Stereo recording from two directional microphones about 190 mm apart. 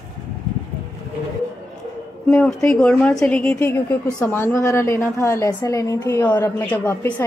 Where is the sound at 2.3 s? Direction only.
5° left (ahead or behind).